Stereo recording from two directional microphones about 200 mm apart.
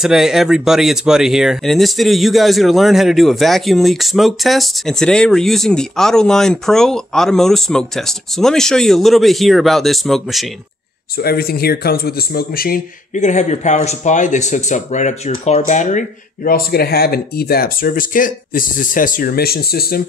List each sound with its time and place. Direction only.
0.0 s speech: centre (ahead or behind)
11.2 s a man's voice: 50° left (ahead or behind)